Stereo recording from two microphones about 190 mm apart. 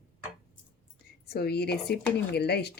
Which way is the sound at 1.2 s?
55° left (ahead or behind).